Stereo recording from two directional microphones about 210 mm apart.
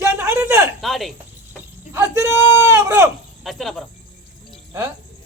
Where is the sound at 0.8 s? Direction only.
Centre (ahead or behind).